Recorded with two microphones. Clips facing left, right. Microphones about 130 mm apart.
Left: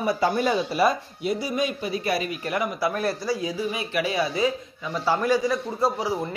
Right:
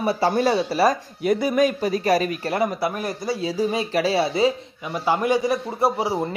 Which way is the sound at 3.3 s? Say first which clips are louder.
Right 4 dB; 35° right (ahead or behind).